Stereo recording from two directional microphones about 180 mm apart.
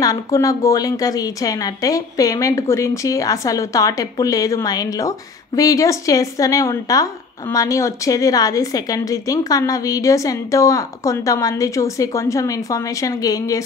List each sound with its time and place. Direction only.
0.0 s speech: 20° left (ahead or behind)